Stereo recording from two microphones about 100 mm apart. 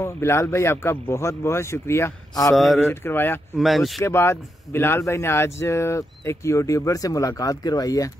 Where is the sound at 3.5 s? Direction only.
Centre (ahead or behind).